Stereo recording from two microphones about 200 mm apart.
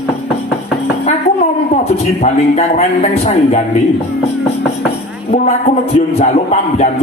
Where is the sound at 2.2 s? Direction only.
30° left (ahead or behind).